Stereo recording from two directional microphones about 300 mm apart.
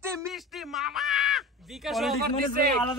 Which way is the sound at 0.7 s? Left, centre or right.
Centre.